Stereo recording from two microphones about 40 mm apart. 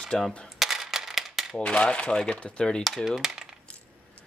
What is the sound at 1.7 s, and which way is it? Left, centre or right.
Speech, left.